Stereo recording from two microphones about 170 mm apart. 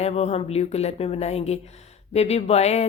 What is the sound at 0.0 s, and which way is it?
Speech, 40° left (ahead or behind).